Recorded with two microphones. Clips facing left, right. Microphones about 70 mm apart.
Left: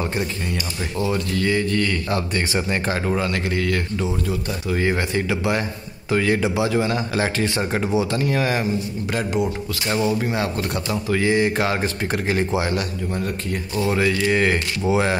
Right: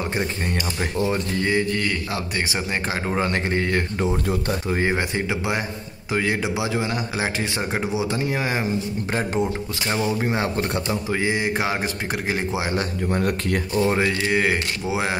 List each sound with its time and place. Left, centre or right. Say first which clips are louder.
0.9 s speech: left 1 dB; right
3.2 s speech: even; right
4.7 s speech: left 4 dB; right
9.8 s speech: left 2 dB; right
13.1 s speech: right 5 dB; right
13.7 s speech: left 1 dB; right
14.3 s speech: left 2 dB; centre